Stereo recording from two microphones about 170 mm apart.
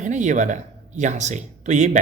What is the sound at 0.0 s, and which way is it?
Speech, 45° right (ahead or behind).